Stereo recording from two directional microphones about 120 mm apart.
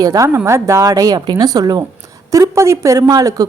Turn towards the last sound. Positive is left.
turn(degrees=-30)  # may be behind; listen again after turning